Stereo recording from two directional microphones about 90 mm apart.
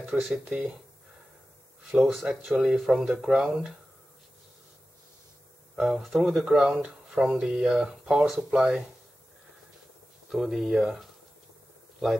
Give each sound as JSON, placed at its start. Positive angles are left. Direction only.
{"t": 0.2, "sound": "speech", "side_deg": -5}
{"t": 1.9, "sound": "speech", "side_deg": 0}
{"t": 5.8, "sound": "speech", "side_deg": -5}
{"t": 10.3, "sound": "speech", "side_deg": 0}